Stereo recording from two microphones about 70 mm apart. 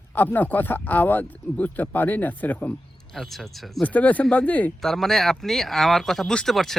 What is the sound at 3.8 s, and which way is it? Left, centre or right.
Speech, left.